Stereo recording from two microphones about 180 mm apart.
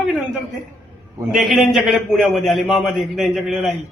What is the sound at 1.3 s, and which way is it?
A man's voice, centre (ahead or behind).